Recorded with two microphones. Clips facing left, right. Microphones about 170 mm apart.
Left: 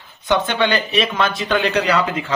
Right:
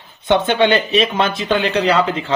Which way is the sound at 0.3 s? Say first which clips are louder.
Right 4 dB; 25° right (ahead or behind).